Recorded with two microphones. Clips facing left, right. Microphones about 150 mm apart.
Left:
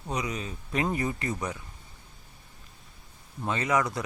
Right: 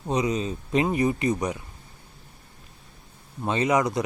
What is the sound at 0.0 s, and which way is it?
Speech, 25° right (ahead or behind).